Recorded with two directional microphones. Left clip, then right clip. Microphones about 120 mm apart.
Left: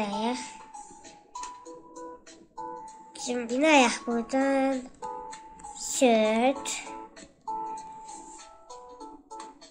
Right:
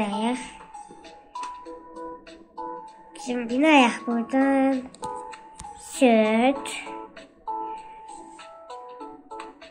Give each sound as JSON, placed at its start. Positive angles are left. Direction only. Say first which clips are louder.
{"t": 0.0, "sound": "music", "louder": "right 3 dB", "side_deg": 25}
{"t": 2.5, "sound": "speech", "louder": "right 3 dB", "side_deg": 20}
{"t": 7.4, "sound": "music", "louder": "right 3 dB", "side_deg": 20}
{"t": 8.9, "sound": "music", "louder": "right 5 dB", "side_deg": 15}